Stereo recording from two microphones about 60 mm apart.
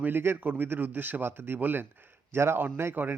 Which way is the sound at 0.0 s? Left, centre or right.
Right.